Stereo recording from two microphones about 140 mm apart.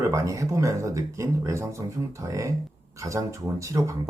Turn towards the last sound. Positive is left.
turn(degrees=-20)  # may be behind; listen again after turning